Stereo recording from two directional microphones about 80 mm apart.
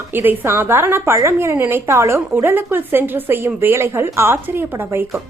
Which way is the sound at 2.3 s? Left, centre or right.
Right.